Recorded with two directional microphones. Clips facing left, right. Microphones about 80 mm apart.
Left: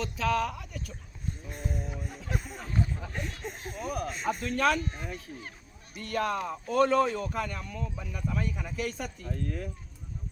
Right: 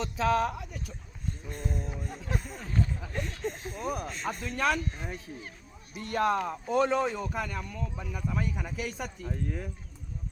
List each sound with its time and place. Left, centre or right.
0.0 s speech: right
1.5 s a sound: centre
2.2 s speech: centre
3.8 s speech: right
4.1 s speech: centre
4.5 s speech: centre
5.0 s speech: right